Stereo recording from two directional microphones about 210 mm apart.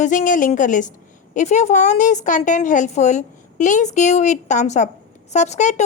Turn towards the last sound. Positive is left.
turn(degrees=35)  # may be behind; listen again after turning